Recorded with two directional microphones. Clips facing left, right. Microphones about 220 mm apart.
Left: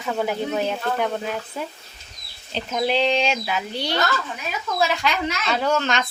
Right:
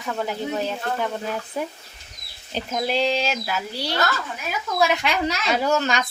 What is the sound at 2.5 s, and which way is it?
Speech, 5° right (ahead or behind).